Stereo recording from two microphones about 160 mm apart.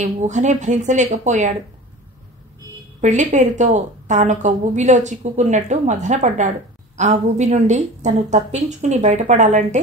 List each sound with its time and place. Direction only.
0.0 s a woman's voice: 50° right (ahead or behind)
3.0 s a woman's voice: 50° right (ahead or behind)